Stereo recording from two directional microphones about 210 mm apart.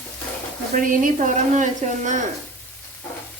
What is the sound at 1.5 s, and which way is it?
Speech, 35° right (ahead or behind).